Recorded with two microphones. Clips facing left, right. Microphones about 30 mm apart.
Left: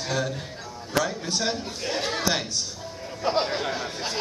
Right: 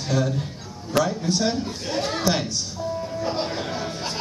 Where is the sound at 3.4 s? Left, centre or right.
Left.